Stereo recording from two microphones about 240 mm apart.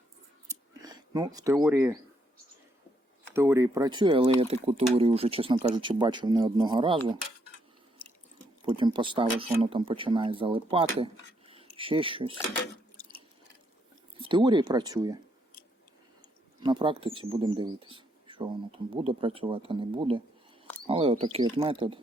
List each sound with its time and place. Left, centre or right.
0.4 s a sound: centre
3.3 s speech: centre
8.0 s drip: centre
8.6 s speech: right
14.2 s speech: centre
16.6 s speech: centre